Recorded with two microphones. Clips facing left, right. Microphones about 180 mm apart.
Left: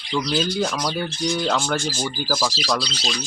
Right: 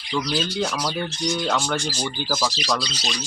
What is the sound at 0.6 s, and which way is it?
Speech, 5° right (ahead or behind).